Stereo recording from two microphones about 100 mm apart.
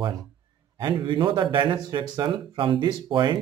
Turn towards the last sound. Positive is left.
turn(degrees=-50)  # may be behind; listen again after turning